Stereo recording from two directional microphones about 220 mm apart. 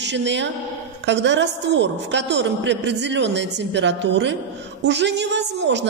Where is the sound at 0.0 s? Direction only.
55° right (ahead or behind).